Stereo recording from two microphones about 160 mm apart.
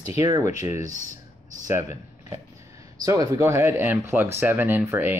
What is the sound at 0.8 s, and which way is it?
Speech, 50° right (ahead or behind).